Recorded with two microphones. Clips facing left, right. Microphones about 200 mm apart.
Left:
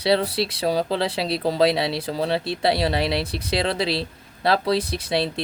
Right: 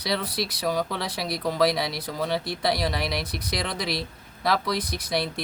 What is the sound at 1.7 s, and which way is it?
Speech, 65° left (ahead or behind).